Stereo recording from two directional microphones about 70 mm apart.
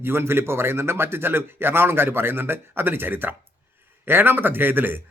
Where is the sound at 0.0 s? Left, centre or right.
Right.